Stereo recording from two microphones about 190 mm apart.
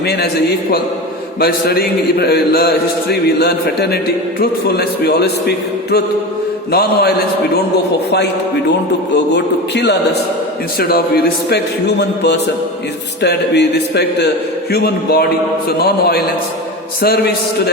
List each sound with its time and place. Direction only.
1.4 s a man's voice: 55° left (ahead or behind)
6.7 s mantra: 55° left (ahead or behind)
9.1 s a man's voice: 65° left (ahead or behind)
10.8 s a man's voice: 55° left (ahead or behind)